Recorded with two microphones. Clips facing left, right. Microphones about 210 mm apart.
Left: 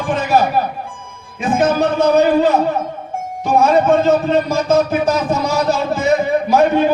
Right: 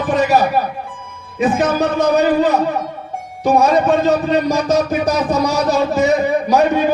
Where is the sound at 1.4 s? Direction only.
35° right (ahead or behind).